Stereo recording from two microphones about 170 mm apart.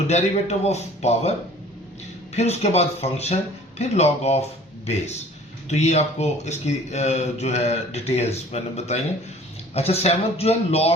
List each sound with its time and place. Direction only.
0.1 s speech: 40° left (ahead or behind)
2.3 s speech: 40° left (ahead or behind)
5.6 s speech: 40° left (ahead or behind)